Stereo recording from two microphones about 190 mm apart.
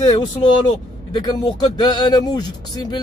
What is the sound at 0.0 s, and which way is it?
Speech, 25° left (ahead or behind).